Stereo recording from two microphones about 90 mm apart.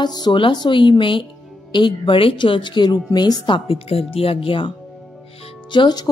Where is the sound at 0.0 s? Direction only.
50° left (ahead or behind).